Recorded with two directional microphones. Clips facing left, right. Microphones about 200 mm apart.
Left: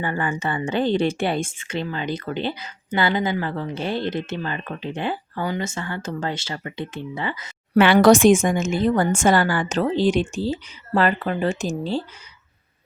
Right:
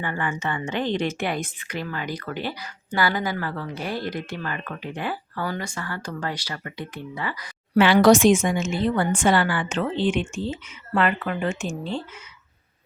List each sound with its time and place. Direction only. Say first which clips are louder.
0.0 s a woman's voice: left 3 dB; 35° left (ahead or behind)
7.8 s a woman's voice: left 2 dB; 55° left (ahead or behind); by 12.0 s 35° left (ahead or behind)